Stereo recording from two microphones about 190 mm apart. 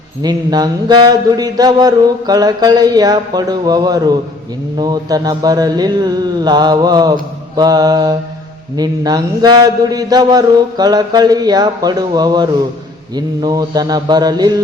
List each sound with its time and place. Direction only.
0.2 s mantra: 20° right (ahead or behind)